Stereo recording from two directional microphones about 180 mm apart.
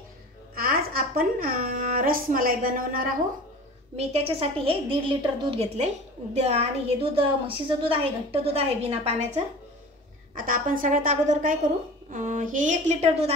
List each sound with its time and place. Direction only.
0.6 s a sound: 55° right (ahead or behind)
3.9 s a woman's voice: 35° right (ahead or behind)
10.3 s a woman's voice: 50° right (ahead or behind)